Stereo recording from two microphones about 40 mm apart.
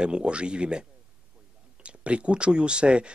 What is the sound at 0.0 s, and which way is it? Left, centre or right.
Speech, right.